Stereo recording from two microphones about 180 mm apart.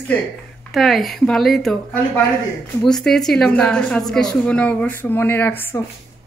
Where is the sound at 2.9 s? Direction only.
Centre (ahead or behind).